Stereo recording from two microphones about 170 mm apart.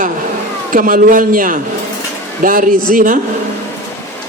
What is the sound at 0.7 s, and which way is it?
A man's voice, 55° right (ahead or behind).